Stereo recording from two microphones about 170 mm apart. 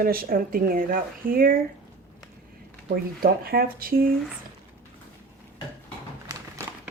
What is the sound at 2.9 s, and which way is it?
Speech, 60° right (ahead or behind).